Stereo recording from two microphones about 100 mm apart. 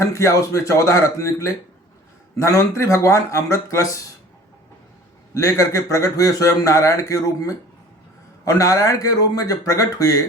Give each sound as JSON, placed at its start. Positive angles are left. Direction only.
{"t": 0.0, "sound": "a man's voice", "side_deg": 30}
{"t": 5.3, "sound": "a man's voice", "side_deg": 35}